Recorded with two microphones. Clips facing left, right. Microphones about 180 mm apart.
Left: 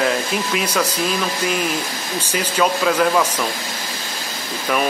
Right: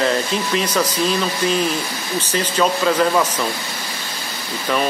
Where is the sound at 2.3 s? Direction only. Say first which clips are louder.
Even; 10° left (ahead or behind).